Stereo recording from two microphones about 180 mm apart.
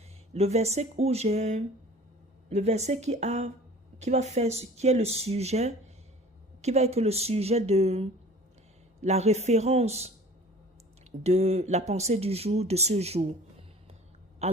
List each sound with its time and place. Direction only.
0.3 s speech: 35° right (ahead or behind)
11.2 s a woman's voice: 35° right (ahead or behind)